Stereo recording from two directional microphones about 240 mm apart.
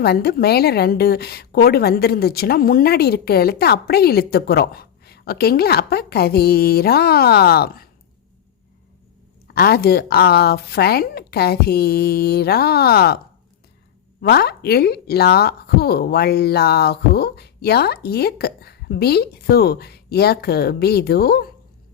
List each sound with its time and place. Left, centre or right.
0.0 s a woman's voice: left
9.6 s a woman's voice: left